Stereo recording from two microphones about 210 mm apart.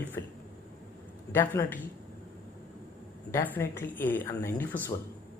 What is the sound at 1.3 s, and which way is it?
Speech, 10° left (ahead or behind).